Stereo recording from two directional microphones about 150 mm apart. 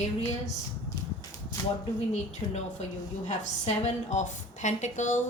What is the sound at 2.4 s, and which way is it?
A woman's voice, 50° left (ahead or behind).